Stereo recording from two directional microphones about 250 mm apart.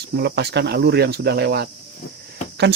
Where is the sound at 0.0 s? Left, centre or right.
Right.